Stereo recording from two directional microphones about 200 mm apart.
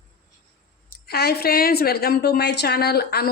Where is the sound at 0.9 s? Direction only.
50° left (ahead or behind).